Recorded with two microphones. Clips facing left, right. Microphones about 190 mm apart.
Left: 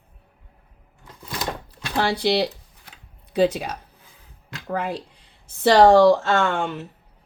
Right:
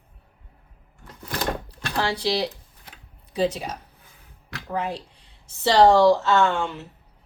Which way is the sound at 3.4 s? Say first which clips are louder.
Left 3 dB; 65° left (ahead or behind).